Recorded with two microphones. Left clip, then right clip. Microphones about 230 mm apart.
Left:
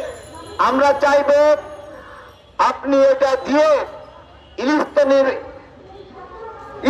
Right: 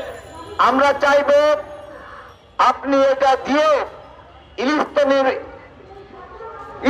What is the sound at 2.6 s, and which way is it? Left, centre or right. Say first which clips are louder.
A man's voice: even; right.